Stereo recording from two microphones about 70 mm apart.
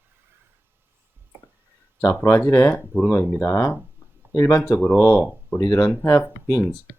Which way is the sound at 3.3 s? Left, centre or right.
Left.